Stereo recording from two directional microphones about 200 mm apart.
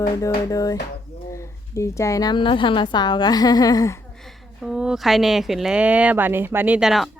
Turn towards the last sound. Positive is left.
turn(degrees=0)  # may be behind; listen again after turning